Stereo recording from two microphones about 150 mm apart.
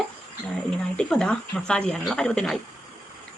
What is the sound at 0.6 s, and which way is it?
Speech, 5° left (ahead or behind).